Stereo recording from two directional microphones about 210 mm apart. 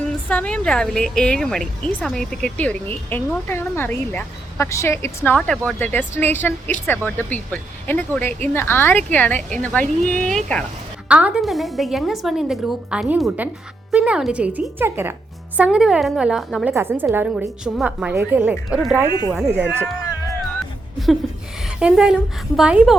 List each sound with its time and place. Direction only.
0.3 s a woman's voice: 5° left (ahead or behind)
16.7 s a woman's voice: 10° right (ahead or behind)
20.0 s music: 15° left (ahead or behind)
21.6 s a woman's voice: 5° right (ahead or behind)